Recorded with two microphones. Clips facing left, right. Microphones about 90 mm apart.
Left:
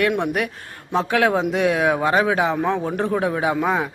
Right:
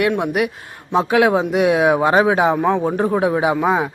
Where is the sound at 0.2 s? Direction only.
10° right (ahead or behind).